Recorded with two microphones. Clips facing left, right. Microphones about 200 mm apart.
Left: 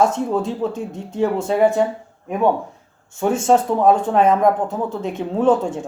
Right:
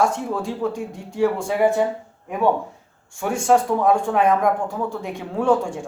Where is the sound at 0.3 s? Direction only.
20° left (ahead or behind).